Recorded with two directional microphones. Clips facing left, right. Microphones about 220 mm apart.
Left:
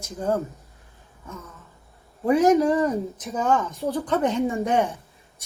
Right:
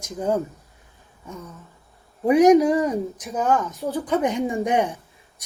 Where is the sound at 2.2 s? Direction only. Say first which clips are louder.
Right 3 dB; 15° right (ahead or behind).